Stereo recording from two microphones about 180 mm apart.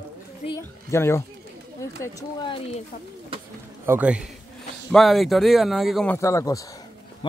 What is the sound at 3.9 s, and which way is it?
A man's voice, 5° right (ahead or behind).